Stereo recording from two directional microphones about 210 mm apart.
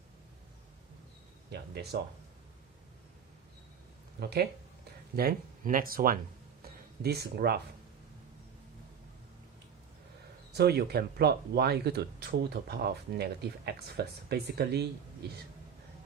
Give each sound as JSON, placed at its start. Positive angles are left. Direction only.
{"t": 1.5, "sound": "speech", "side_deg": -50}
{"t": 4.2, "sound": "speech", "side_deg": -50}
{"t": 6.6, "sound": "a sound", "side_deg": -50}
{"t": 10.5, "sound": "speech", "side_deg": -50}